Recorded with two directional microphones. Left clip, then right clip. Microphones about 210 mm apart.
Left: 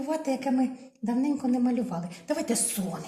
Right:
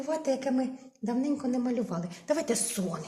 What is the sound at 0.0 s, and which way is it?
A woman's voice, 50° right (ahead or behind).